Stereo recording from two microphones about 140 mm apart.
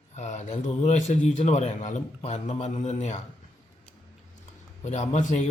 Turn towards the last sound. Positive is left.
turn(degrees=60)  # may be behind; listen again after turning